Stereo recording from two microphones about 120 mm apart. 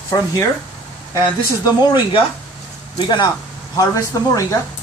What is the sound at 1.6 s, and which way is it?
Speech, 35° left (ahead or behind).